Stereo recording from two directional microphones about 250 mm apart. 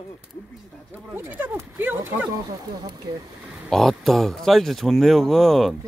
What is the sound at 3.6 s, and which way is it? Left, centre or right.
Speech, centre.